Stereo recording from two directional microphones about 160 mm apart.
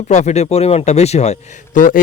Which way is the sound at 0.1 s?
45° left (ahead or behind).